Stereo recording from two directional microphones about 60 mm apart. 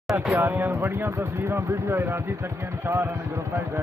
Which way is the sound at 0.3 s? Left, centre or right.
Right.